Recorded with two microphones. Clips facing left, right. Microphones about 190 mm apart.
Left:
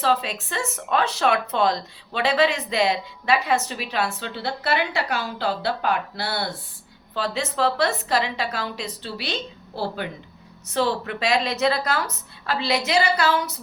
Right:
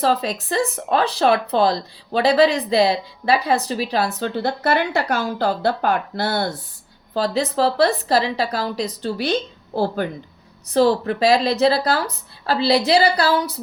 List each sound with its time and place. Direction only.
0.0 s speech: 40° right (ahead or behind)